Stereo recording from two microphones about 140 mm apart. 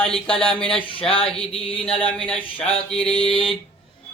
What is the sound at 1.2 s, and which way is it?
Speech, 45° left (ahead or behind).